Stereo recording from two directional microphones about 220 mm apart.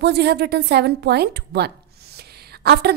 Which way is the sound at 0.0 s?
50° right (ahead or behind).